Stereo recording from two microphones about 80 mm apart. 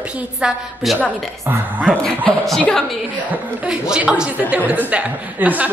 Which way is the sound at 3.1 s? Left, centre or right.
Centre.